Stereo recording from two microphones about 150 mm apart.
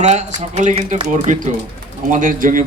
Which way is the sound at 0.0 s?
50° right (ahead or behind).